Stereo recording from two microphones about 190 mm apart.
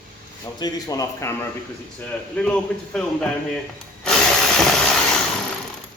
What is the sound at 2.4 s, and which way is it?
Speech, 5° left (ahead or behind).